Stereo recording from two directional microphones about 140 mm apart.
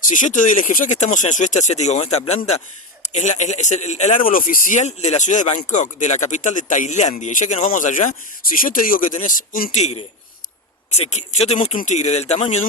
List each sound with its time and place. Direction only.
0.0 s speech: 65° left (ahead or behind)
7.7 s speech: 65° left (ahead or behind)
8.5 s speech: 80° left
9.7 s speech: 50° left (ahead or behind)